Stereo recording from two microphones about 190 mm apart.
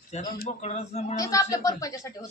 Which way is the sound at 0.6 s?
35° left (ahead or behind).